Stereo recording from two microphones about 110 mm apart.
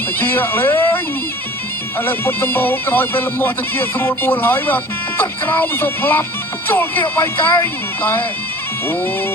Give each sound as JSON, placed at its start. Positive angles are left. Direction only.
{"t": 0.2, "sound": "speech", "side_deg": 20}